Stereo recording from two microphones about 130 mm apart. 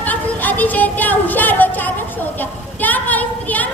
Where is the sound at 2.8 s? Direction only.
10° left (ahead or behind).